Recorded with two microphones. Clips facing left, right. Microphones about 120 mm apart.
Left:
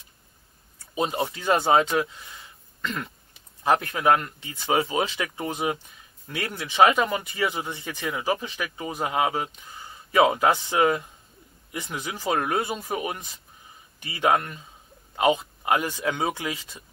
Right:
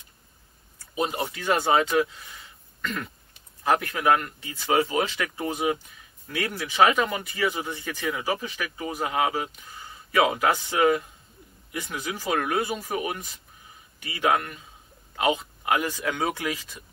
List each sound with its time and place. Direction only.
0.9 s speech: 25° left (ahead or behind)
2.8 s throat clearing: 25° left (ahead or behind)
3.6 s speech: 20° left (ahead or behind)